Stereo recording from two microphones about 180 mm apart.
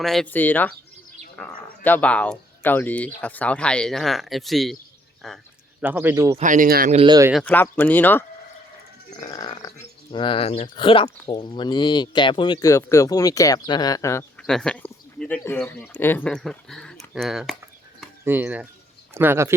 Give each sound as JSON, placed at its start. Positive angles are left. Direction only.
{"t": 0.0, "sound": "speech", "side_deg": 0}
{"t": 5.8, "sound": "a man's voice", "side_deg": -10}
{"t": 6.4, "sound": "speech", "side_deg": -45}
{"t": 6.9, "sound": "speech", "side_deg": -30}
{"t": 7.4, "sound": "speech", "side_deg": 10}
{"t": 9.2, "sound": "a sound", "side_deg": 20}
{"t": 10.1, "sound": "speech", "side_deg": 30}
{"t": 14.3, "sound": "a man's voice", "side_deg": 5}